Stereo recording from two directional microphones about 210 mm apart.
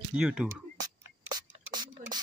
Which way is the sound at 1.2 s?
20° right (ahead or behind).